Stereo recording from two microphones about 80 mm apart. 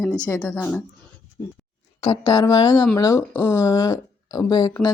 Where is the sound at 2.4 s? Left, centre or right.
Left.